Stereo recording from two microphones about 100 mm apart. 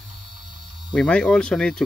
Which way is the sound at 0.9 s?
10° left (ahead or behind).